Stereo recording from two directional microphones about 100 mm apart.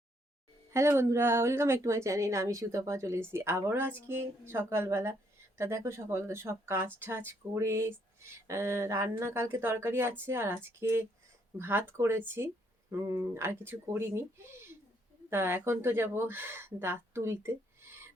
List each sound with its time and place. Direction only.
0.7 s speech: 25° right (ahead or behind)